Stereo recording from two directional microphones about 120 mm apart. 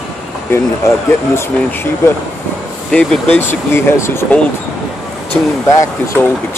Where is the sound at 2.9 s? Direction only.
10° left (ahead or behind).